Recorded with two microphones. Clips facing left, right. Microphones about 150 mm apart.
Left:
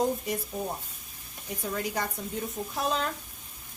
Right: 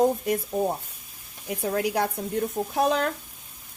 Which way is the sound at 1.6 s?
70° right (ahead or behind).